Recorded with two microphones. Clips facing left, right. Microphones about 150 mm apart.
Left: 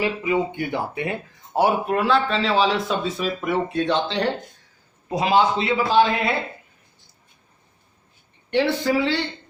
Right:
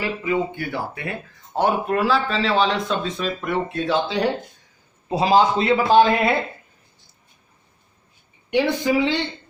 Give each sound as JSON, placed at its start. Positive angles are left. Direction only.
{"t": 0.0, "sound": "speech", "side_deg": 20}
{"t": 1.5, "sound": "speech", "side_deg": 10}
{"t": 2.0, "sound": "speech", "side_deg": 0}
{"t": 5.0, "sound": "a man's voice", "side_deg": -30}
{"t": 8.4, "sound": "speech", "side_deg": -15}